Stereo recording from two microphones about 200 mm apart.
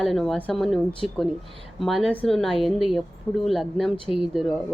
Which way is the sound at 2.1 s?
5° left (ahead or behind).